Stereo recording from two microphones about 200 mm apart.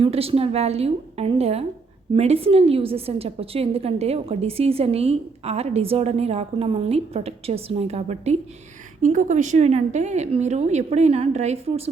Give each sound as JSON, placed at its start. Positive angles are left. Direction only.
{"t": 0.0, "sound": "a woman's voice", "side_deg": -30}